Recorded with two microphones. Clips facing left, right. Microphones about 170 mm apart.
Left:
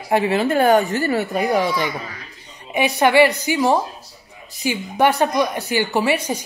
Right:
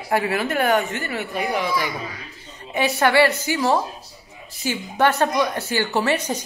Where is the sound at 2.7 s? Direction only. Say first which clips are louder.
Left 3 dB; 15° left (ahead or behind).